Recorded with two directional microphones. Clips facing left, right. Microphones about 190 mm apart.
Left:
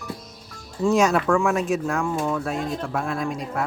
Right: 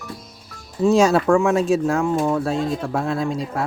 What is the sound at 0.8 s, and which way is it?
Speech, 30° right (ahead or behind).